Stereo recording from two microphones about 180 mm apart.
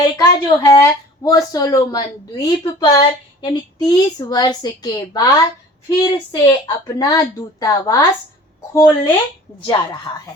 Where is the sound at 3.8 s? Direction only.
20° left (ahead or behind).